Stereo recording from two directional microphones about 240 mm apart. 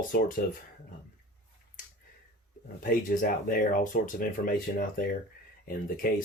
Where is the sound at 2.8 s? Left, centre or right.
Left.